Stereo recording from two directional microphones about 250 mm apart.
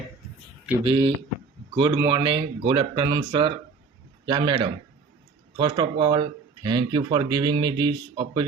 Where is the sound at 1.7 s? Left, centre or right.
Centre.